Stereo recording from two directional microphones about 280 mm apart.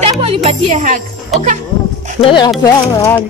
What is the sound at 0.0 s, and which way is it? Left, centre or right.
Speech, right.